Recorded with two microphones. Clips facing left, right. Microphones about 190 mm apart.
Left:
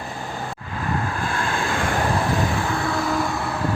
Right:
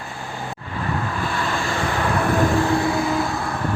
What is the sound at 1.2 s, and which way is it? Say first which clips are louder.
Vehicle: even; 50° left (ahead or behind).